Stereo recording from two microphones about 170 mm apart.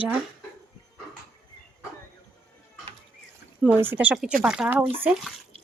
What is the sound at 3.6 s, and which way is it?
Speech, 10° right (ahead or behind).